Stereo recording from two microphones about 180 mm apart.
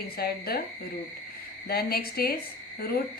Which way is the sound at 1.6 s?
60° left (ahead or behind).